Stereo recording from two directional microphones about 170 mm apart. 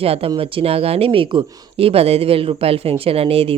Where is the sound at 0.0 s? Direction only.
35° right (ahead or behind).